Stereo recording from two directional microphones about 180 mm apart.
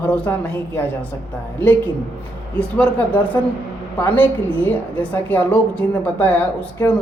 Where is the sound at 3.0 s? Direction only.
10° left (ahead or behind).